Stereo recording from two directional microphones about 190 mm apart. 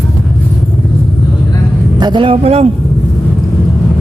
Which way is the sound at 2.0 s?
25° right (ahead or behind).